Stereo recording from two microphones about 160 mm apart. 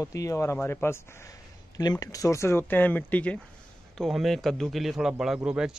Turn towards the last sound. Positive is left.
turn(degrees=-5)  # may be behind; listen again after turning